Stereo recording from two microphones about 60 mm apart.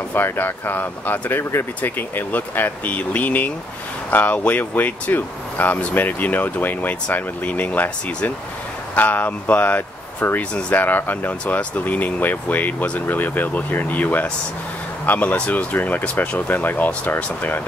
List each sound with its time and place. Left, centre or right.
0.1 s speech: left